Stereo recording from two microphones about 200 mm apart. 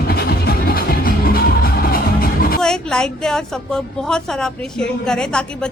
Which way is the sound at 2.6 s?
5° left (ahead or behind).